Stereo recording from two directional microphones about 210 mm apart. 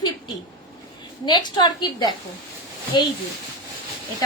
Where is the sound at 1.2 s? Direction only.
20° left (ahead or behind).